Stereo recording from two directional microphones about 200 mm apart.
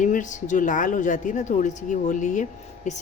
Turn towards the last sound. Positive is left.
turn(degrees=35)  # may be behind; listen again after turning